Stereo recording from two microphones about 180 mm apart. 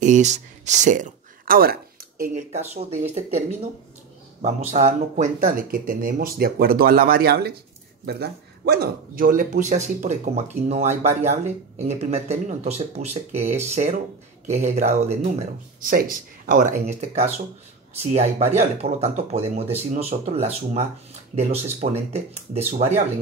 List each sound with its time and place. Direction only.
0.0 s speech: 40° right (ahead or behind)
15.9 s speech: 50° right (ahead or behind)